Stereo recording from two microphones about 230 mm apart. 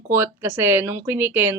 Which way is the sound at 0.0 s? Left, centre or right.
Centre.